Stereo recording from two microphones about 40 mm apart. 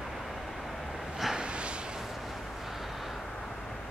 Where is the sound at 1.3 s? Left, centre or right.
Right.